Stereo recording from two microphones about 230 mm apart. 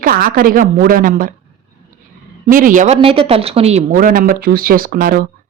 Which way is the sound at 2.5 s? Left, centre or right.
Right.